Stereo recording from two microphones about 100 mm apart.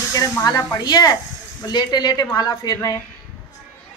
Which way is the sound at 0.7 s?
45° left (ahead or behind).